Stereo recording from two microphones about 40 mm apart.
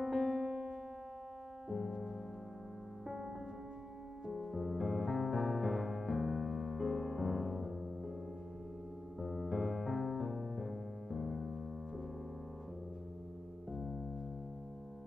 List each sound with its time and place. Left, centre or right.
0.0 s music: centre
1.7 s music: centre
3.1 s music: centre
4.3 s music: centre
9.2 s piano: centre